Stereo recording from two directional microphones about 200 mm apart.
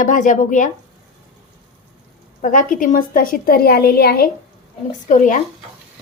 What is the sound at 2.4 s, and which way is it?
A woman's voice, 40° left (ahead or behind).